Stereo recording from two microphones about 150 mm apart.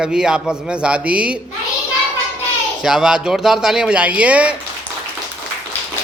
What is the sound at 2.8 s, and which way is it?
A man's voice, 5° right (ahead or behind).